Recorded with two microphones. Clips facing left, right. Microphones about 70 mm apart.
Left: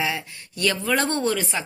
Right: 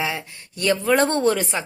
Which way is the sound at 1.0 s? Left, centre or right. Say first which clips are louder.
Right 4 dB; right.